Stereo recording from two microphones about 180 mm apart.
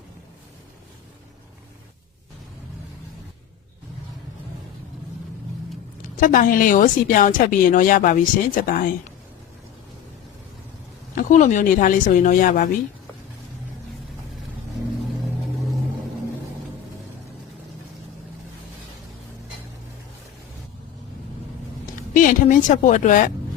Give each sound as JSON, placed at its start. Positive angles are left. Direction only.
{"t": 6.1, "sound": "a woman's voice", "side_deg": 50}
{"t": 11.1, "sound": "a woman's voice", "side_deg": 45}
{"t": 22.1, "sound": "a woman's voice", "side_deg": 50}